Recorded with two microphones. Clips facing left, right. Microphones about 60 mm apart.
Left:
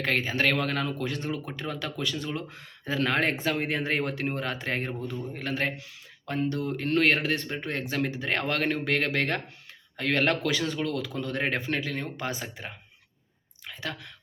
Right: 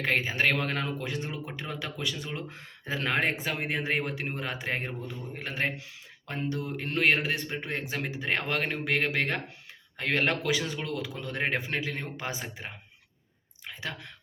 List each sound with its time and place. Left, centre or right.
0.0 s a man's voice: centre
7.7 s a man's voice: centre